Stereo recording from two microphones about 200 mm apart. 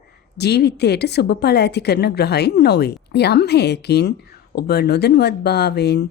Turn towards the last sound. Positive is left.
turn(degrees=55)  # may be behind; listen again after turning